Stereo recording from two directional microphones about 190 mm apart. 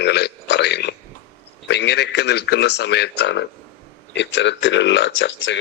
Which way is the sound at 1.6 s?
65° left (ahead or behind).